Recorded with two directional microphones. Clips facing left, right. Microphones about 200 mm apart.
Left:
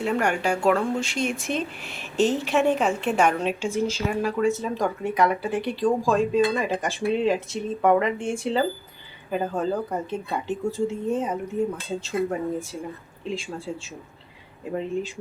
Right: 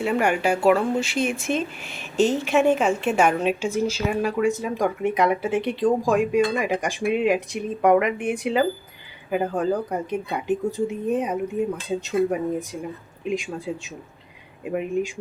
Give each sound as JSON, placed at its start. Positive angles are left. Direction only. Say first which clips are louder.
{"t": 0.0, "sound": "a woman's voice", "louder": "right 2 dB", "side_deg": -5}
{"t": 14.6, "sound": "speech", "louder": "right 3 dB", "side_deg": -15}